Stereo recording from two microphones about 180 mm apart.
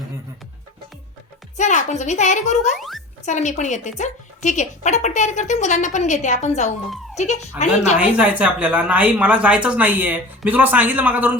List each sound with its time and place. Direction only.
1.5 s speech: 40° left (ahead or behind)
2.7 s a child's voice: centre (ahead or behind)
3.2 s speech: 40° left (ahead or behind)
7.9 s speech: 10° right (ahead or behind)